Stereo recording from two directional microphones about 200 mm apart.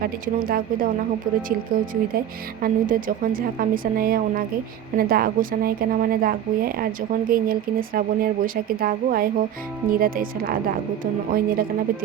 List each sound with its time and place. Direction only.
0.0 s a woman's voice: 45° right (ahead or behind)